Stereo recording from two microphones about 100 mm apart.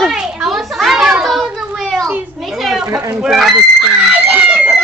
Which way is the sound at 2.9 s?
5° right (ahead or behind).